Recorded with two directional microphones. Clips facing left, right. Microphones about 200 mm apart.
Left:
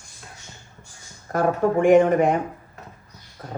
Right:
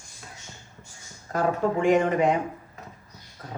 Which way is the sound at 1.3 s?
55° left (ahead or behind).